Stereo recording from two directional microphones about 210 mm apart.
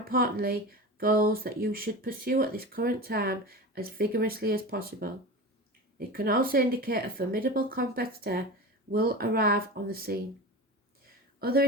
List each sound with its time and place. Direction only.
0.0 s speech: 45° right (ahead or behind)
11.3 s speech: 45° right (ahead or behind)